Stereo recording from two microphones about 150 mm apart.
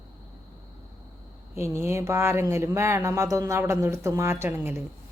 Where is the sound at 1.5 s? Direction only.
15° right (ahead or behind).